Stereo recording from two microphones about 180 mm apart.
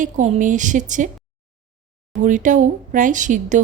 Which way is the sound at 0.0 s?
45° right (ahead or behind).